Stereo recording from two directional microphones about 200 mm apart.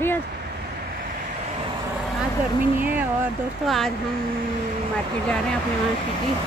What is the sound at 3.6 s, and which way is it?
Speech, centre (ahead or behind).